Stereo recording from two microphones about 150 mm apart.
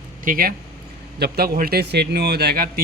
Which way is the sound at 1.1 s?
90° right.